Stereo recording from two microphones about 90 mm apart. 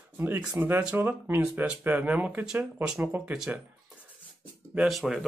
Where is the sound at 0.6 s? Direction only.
25° right (ahead or behind).